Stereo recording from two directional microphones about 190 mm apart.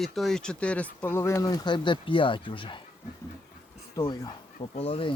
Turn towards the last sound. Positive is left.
turn(degrees=30)  # may be behind; listen again after turning